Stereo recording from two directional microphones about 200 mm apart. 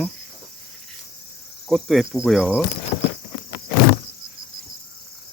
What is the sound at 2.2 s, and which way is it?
Speech, centre (ahead or behind).